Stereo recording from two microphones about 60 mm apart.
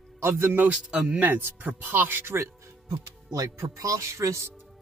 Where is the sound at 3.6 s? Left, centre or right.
Right.